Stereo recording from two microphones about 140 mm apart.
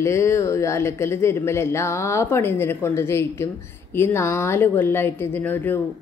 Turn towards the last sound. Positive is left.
turn(degrees=15)  # may be behind; listen again after turning